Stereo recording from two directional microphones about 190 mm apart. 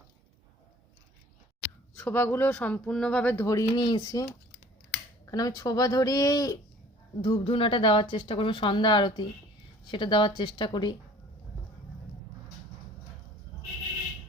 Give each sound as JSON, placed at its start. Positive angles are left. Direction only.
{"t": 2.0, "sound": "speech", "side_deg": 10}